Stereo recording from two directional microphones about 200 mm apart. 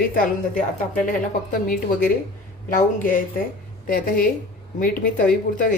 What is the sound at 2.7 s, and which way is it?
A woman's voice, 40° left (ahead or behind).